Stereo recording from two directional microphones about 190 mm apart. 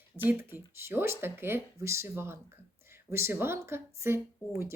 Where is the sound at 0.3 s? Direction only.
10° right (ahead or behind).